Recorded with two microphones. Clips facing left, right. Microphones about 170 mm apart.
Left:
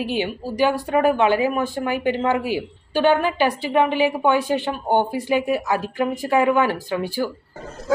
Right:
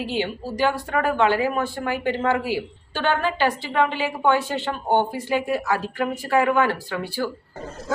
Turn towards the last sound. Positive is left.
turn(degrees=15)  # may be behind; listen again after turning